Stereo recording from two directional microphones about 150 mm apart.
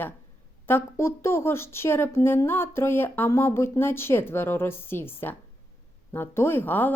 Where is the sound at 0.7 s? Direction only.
15° left (ahead or behind).